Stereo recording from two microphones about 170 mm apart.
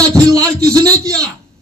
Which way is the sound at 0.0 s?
20° right (ahead or behind).